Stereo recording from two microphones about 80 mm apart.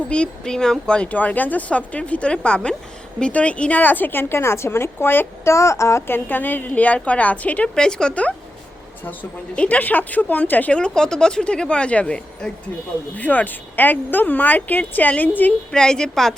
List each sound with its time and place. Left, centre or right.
0.1 s a woman's voice: centre
9.6 s a woman's voice: left
15.7 s speech: centre